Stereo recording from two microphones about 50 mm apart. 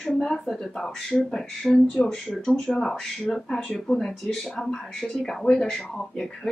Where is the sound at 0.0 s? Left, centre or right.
Centre.